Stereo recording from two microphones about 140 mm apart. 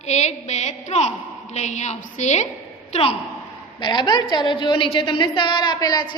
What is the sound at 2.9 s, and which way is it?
Speech, 45° left (ahead or behind).